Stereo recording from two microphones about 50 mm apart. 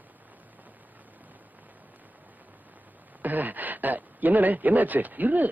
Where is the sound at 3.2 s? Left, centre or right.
Right.